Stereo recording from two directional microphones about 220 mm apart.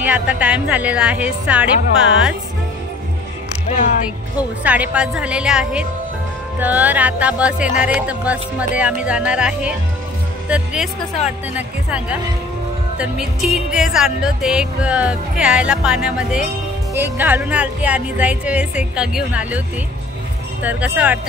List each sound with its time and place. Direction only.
0.0 s music: 5° right (ahead or behind)
3.6 s speech: 30° left (ahead or behind)
4.4 s music: 5° right (ahead or behind)
20.6 s music: 5° right (ahead or behind)